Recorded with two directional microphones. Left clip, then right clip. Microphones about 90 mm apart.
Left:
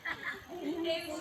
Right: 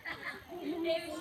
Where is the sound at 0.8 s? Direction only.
10° right (ahead or behind).